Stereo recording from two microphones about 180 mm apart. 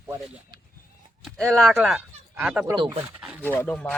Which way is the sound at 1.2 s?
Centre (ahead or behind).